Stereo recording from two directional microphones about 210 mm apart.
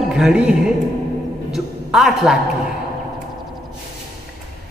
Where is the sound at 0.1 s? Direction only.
5° right (ahead or behind).